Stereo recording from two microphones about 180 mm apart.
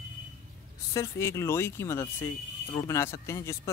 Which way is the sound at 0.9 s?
15° left (ahead or behind).